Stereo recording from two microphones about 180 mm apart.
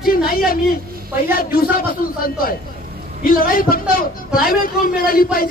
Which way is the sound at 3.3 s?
55° left (ahead or behind).